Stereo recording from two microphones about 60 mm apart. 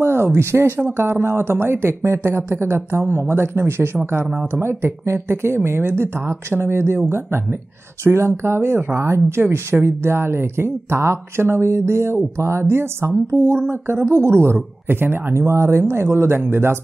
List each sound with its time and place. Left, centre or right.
0.0 s speech: right
15.3 s speech: right